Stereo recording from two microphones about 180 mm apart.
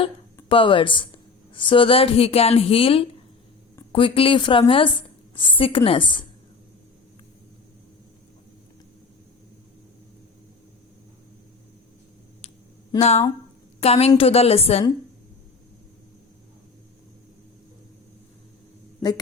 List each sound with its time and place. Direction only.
0.4 s speech: 30° left (ahead or behind)
13.0 s a woman's voice: 35° left (ahead or behind)